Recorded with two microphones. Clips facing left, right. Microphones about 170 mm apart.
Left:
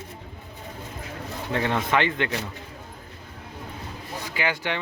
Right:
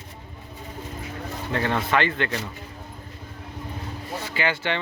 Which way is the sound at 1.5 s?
15° left (ahead or behind).